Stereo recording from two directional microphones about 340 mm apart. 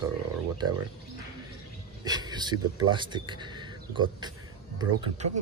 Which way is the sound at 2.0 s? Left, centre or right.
Centre.